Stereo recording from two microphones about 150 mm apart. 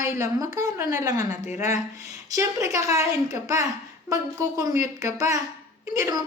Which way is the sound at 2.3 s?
20° right (ahead or behind).